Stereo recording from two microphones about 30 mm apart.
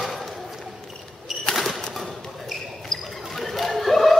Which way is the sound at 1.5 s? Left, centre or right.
Centre.